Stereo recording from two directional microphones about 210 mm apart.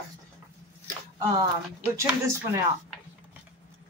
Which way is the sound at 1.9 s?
15° right (ahead or behind).